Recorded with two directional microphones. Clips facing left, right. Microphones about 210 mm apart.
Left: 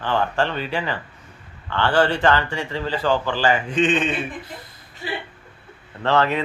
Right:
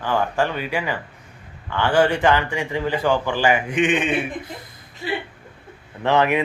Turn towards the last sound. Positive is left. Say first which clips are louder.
# right 2 dB
turn(degrees=-15)  # may be behind; listen again after turning